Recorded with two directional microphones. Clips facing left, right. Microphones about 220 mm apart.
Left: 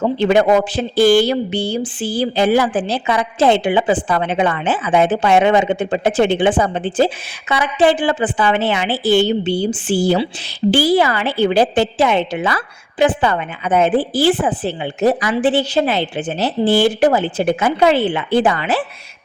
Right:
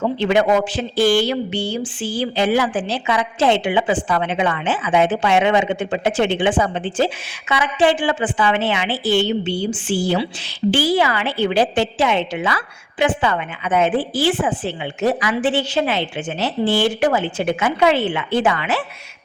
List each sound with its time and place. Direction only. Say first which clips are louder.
0.0 s a woman's voice: left 3 dB; 40° left (ahead or behind)